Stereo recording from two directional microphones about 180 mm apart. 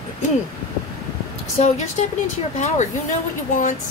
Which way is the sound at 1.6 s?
40° left (ahead or behind).